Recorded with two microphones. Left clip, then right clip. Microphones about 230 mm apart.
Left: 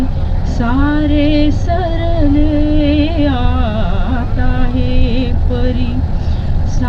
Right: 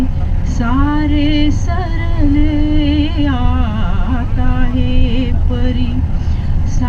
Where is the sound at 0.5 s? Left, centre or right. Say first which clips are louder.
Left 1 dB; right.